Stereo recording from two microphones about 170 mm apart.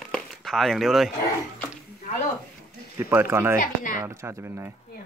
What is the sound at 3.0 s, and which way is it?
Speech, 15° right (ahead or behind).